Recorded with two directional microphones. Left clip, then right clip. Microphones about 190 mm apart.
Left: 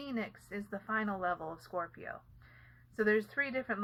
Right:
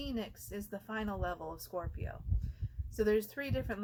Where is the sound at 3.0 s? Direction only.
35° right (ahead or behind).